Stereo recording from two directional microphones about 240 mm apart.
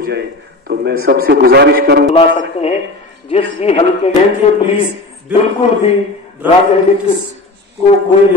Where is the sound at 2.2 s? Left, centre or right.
Left.